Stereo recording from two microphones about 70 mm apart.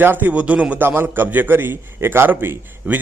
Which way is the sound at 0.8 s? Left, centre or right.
Right.